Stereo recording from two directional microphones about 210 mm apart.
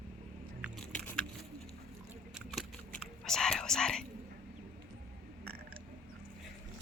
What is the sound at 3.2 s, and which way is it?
Whispering, centre (ahead or behind).